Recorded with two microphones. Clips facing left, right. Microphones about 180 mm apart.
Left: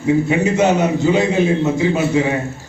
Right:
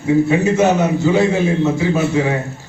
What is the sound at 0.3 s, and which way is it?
A man's voice, 15° left (ahead or behind).